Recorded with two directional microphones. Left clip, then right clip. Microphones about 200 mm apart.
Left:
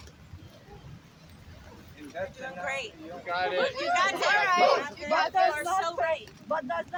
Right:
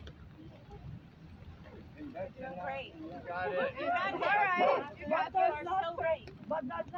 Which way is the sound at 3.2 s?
45° left (ahead or behind).